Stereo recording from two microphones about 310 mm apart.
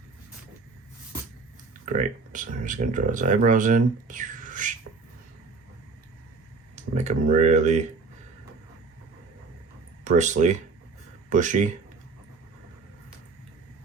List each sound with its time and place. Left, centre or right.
1.8 s speech: right
6.7 s speech: right
10.0 s speech: right